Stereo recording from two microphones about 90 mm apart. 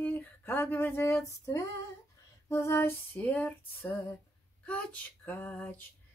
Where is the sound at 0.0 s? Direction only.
20° left (ahead or behind).